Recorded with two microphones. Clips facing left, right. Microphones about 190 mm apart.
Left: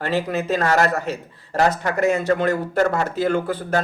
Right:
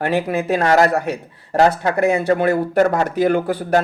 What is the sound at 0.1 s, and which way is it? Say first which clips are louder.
A man's voice: even; 15° right (ahead or behind).